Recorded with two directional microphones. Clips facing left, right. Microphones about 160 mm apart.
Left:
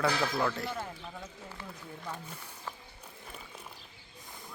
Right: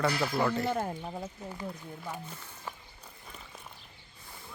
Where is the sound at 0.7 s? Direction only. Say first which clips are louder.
Right 7 dB; 45° right (ahead or behind).